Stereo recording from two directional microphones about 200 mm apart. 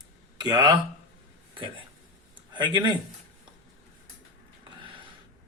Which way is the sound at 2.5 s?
25° right (ahead or behind).